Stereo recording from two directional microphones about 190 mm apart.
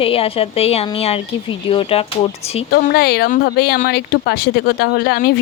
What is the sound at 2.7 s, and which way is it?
Speech, 55° left (ahead or behind).